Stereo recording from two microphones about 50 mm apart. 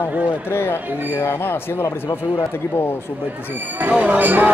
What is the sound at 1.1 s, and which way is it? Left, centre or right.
Speech, left.